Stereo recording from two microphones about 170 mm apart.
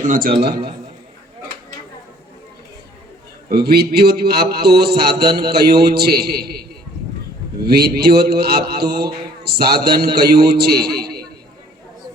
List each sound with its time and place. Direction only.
0.0 s a man's voice: 55° right (ahead or behind)
3.5 s a man's voice: 70° right (ahead or behind)